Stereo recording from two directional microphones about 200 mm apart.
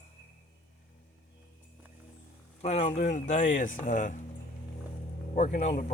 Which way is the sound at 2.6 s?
35° left (ahead or behind).